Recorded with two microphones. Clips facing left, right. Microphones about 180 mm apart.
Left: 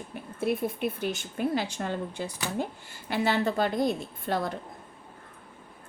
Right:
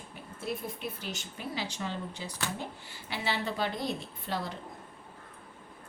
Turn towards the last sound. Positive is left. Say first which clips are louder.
# left 6 dB
turn(degrees=50)  # may be behind; listen again after turning